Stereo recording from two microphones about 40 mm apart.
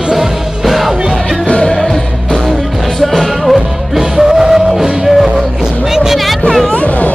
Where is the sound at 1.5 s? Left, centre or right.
Left.